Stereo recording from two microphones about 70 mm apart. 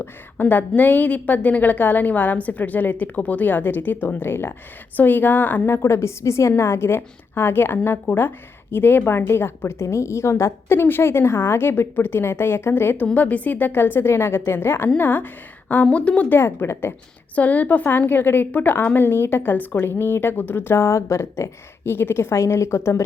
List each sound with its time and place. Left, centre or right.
0.0 s a woman's voice: left
5.7 s a woman's voice: left; by 16.2 s centre
16.3 s a woman's voice: left
17.3 s a woman's voice: left
20.7 s a woman's voice: left